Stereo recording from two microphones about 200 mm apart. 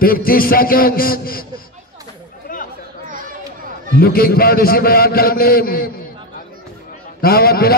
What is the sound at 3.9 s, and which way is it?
A man's voice, 50° left (ahead or behind).